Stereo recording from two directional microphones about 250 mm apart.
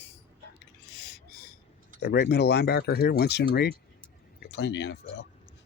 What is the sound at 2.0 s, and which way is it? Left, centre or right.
Speech, left.